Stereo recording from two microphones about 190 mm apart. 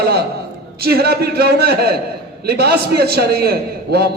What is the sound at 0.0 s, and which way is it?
A man's voice, 55° right (ahead or behind).